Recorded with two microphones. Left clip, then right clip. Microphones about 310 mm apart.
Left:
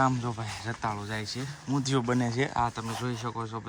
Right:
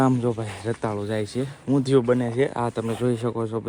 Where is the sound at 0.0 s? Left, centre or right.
Centre.